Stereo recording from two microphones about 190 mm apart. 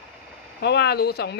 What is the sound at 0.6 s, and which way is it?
Speech, 60° left (ahead or behind).